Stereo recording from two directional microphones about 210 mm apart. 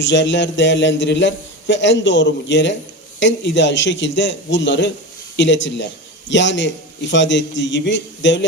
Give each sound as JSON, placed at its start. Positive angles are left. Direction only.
{"t": 0.0, "sound": "a man's voice", "side_deg": 60}